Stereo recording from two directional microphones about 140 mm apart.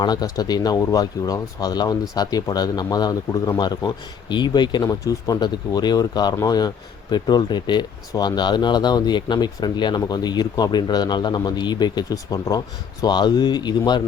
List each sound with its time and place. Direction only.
0.0 s speech: 30° left (ahead or behind)